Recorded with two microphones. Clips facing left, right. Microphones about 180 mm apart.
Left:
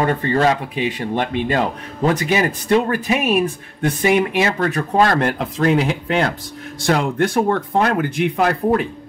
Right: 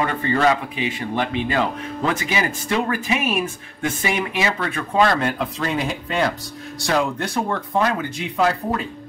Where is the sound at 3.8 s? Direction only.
45° left (ahead or behind).